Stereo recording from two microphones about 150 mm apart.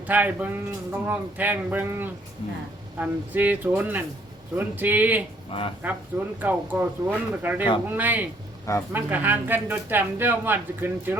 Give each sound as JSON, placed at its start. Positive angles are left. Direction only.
{"t": 0.1, "sound": "speech", "side_deg": -10}
{"t": 5.5, "sound": "speech", "side_deg": 35}
{"t": 5.8, "sound": "speech", "side_deg": -10}